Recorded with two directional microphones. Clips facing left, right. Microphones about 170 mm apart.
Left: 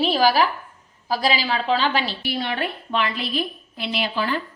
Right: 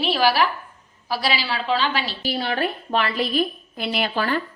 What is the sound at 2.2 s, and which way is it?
A woman's voice, 35° right (ahead or behind).